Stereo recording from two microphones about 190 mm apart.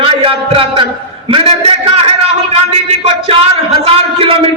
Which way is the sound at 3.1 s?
30° right (ahead or behind).